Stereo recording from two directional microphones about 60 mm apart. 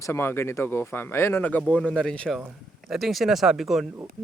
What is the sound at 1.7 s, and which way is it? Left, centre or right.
Speech, centre.